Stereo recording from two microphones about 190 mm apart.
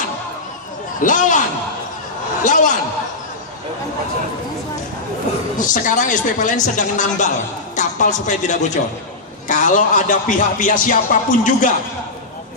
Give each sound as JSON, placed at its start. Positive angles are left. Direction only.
{"t": 1.0, "sound": "a woman's voice", "side_deg": 40}
{"t": 2.4, "sound": "a woman's voice", "side_deg": 40}
{"t": 5.5, "sound": "a woman's voice", "side_deg": 45}
{"t": 9.5, "sound": "music", "side_deg": 45}